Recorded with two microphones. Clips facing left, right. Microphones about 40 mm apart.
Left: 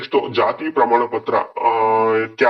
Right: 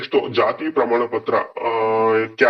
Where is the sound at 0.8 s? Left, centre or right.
Left.